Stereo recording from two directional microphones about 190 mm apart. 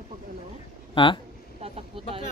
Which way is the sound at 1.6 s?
30° right (ahead or behind).